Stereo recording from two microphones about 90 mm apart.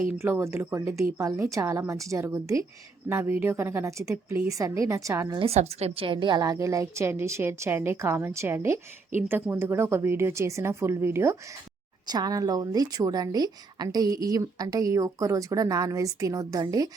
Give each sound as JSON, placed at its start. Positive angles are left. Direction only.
{"t": 0.2, "sound": "a woman's voice", "side_deg": -30}
{"t": 5.9, "sound": "a woman's voice", "side_deg": -80}
{"t": 6.5, "sound": "a woman's voice", "side_deg": -35}
{"t": 12.0, "sound": "speech", "side_deg": -50}